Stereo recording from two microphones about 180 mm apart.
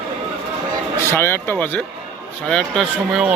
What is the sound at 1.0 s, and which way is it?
Speech, 10° left (ahead or behind).